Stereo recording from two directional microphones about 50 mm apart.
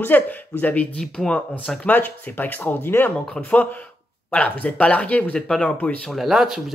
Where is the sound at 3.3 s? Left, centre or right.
Left.